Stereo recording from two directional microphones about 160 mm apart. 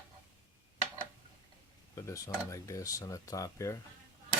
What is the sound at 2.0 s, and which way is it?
Speech, 20° left (ahead or behind).